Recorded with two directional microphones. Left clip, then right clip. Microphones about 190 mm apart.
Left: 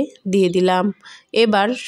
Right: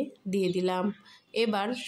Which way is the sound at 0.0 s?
40° left (ahead or behind).